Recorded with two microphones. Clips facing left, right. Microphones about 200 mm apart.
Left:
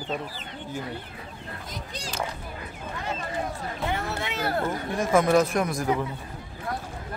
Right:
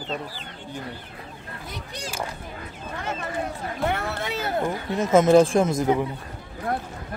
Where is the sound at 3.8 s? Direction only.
65° right (ahead or behind).